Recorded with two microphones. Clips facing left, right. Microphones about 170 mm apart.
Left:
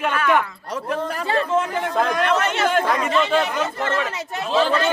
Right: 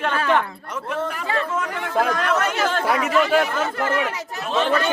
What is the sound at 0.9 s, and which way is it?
Speech, 35° left (ahead or behind).